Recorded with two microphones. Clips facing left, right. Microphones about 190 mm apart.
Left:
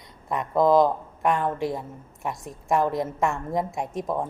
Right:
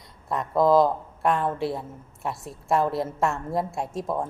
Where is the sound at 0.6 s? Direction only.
20° left (ahead or behind).